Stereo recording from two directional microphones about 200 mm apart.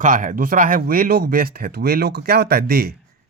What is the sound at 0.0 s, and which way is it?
Speech, 40° right (ahead or behind).